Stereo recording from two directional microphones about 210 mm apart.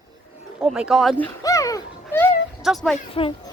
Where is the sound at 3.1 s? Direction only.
25° left (ahead or behind).